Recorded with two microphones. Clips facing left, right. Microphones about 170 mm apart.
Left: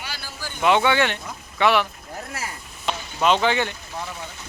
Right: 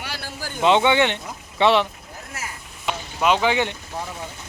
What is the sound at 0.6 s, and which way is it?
Speech, 20° right (ahead or behind).